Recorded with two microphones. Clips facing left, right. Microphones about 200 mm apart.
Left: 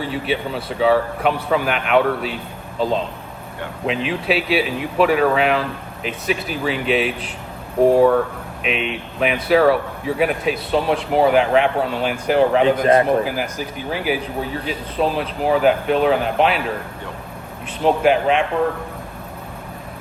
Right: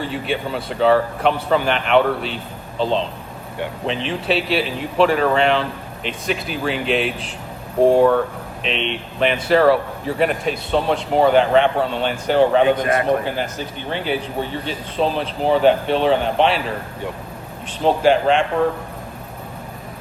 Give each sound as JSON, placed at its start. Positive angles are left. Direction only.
{"t": 0.0, "sound": "speech", "side_deg": 0}
{"t": 12.8, "sound": "a man's voice", "side_deg": 30}
{"t": 13.2, "sound": "speech", "side_deg": 5}
{"t": 17.8, "sound": "speech", "side_deg": 5}